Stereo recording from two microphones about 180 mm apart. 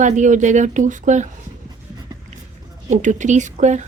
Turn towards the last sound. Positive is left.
turn(degrees=-40)  # may be behind; listen again after turning